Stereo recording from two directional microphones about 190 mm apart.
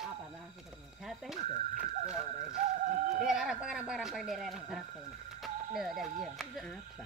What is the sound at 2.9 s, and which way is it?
Speech, 40° right (ahead or behind).